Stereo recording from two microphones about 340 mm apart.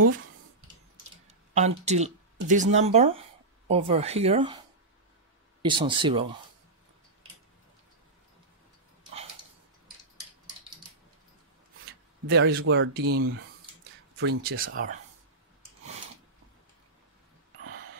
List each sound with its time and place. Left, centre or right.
1.2 s speech: centre
12.3 s speech: right